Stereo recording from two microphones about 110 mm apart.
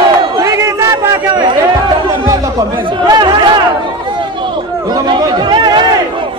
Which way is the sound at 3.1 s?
40° right (ahead or behind).